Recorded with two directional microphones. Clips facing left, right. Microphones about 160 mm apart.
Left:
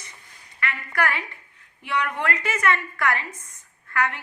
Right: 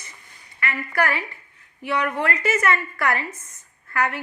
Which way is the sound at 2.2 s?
40° right (ahead or behind).